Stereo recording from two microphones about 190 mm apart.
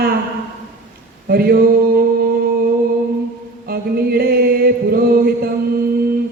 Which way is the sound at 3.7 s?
55° right (ahead or behind).